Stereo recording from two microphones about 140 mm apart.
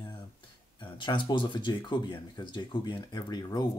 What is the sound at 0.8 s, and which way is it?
Speech, 35° left (ahead or behind).